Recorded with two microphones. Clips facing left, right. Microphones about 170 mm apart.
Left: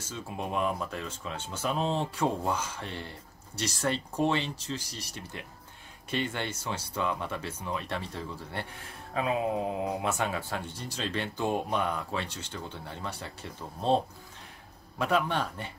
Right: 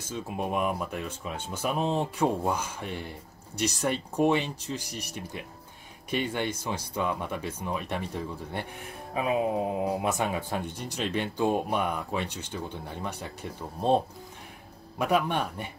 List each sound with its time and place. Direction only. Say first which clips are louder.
0.1 s speech: right 3 dB; 15° right (ahead or behind)